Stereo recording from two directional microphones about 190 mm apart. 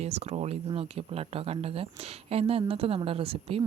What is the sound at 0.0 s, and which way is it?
A woman's voice, 35° right (ahead or behind).